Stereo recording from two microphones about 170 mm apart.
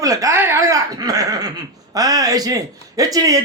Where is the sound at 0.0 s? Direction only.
20° right (ahead or behind).